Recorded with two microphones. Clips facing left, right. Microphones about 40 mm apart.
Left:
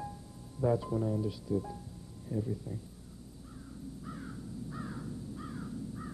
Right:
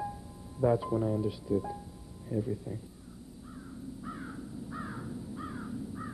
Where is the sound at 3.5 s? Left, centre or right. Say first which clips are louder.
Right 2 dB; centre.